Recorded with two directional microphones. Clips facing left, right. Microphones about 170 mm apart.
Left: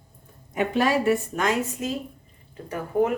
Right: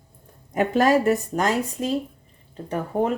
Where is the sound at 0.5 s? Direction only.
40° right (ahead or behind).